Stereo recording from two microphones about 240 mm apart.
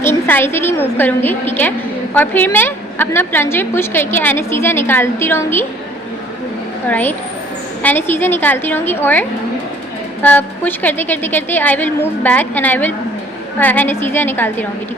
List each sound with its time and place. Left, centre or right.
0.0 s a woman's voice: centre
6.8 s a woman's voice: centre
10.2 s a woman's voice: centre